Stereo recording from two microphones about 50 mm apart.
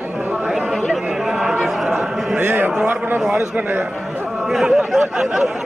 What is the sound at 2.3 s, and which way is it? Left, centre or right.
Speech, right.